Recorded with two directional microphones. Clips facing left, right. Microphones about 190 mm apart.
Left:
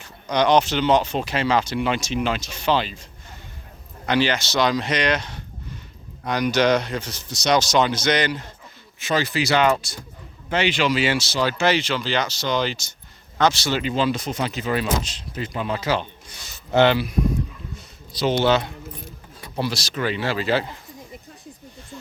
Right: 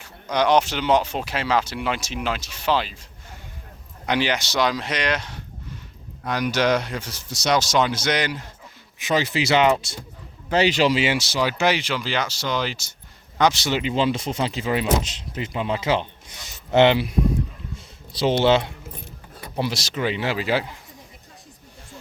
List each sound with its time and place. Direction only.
0.0 s speech: 5° right (ahead or behind)
4.0 s speech: 15° right (ahead or behind)
10.5 s speech: 40° right (ahead or behind)
10.9 s speech: 20° right (ahead or behind)
13.4 s speech: 20° right (ahead or behind)
17.7 s a sound: 30° right (ahead or behind)
19.5 s speech: 20° right (ahead or behind)